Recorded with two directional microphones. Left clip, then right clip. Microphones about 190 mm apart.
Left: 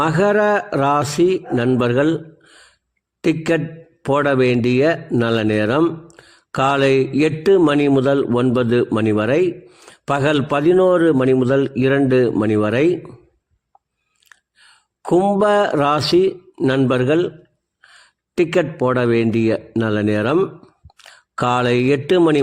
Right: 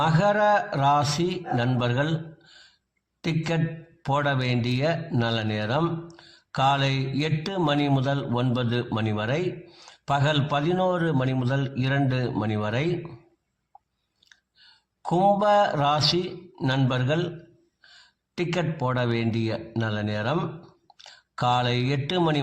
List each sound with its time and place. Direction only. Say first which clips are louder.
0.0 s a man's voice: left 6 dB; 45° left (ahead or behind)
14.3 s speech: left 6 dB; 45° left (ahead or behind)